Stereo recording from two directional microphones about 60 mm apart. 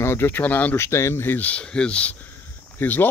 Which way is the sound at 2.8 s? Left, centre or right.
Left.